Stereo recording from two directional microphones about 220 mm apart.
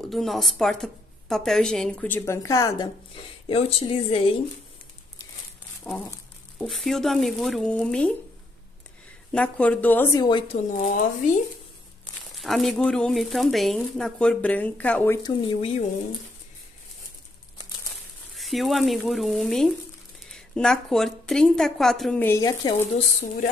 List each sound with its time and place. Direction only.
0.1 s speech: centre (ahead or behind)
3.4 s speech: 25° left (ahead or behind)
5.9 s speech: 5° left (ahead or behind)
9.3 s speech: 5° left (ahead or behind); by 10.6 s 20° left (ahead or behind)
10.7 s speech: 35° left (ahead or behind)
12.4 s speech: centre (ahead or behind)
15.2 s speech: 20° left (ahead or behind)
18.3 s speech: centre (ahead or behind); by 23.0 s 20° left (ahead or behind)